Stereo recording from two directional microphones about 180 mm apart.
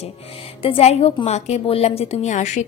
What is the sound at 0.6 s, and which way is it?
A woman's voice, 30° left (ahead or behind).